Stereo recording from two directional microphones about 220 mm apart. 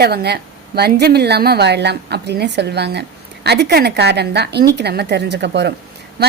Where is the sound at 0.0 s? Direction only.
45° right (ahead or behind).